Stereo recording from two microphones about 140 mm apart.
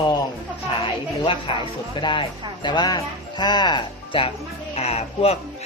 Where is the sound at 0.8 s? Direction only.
40° left (ahead or behind).